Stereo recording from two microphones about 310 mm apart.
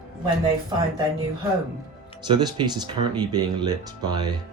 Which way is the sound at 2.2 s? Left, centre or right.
Centre.